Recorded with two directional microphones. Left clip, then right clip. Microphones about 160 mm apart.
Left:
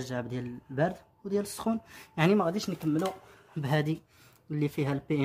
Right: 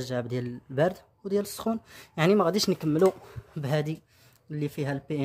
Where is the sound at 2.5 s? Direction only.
80° right.